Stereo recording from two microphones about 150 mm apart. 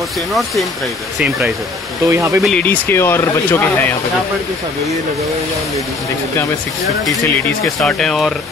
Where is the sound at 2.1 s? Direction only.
20° right (ahead or behind).